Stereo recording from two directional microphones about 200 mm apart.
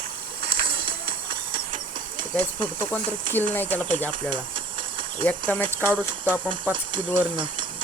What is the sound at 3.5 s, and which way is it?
Speech, 10° left (ahead or behind).